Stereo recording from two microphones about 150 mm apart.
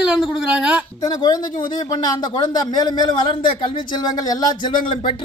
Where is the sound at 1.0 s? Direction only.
25° left (ahead or behind).